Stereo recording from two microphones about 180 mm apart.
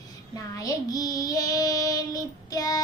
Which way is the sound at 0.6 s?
20° left (ahead or behind).